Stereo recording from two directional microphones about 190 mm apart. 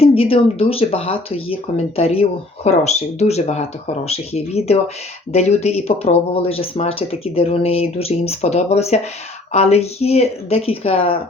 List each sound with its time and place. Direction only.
0.0 s speech: 30° left (ahead or behind)